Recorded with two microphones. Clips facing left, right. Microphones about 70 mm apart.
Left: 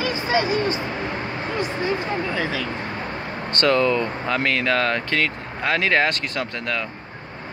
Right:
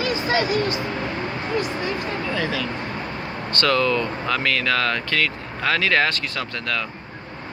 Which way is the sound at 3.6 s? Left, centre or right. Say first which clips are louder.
Left 1 dB; left.